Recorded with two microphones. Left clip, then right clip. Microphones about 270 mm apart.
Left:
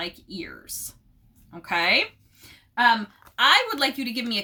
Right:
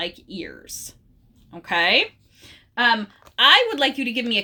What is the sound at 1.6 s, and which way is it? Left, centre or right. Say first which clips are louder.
Speech: right 3 dB; centre.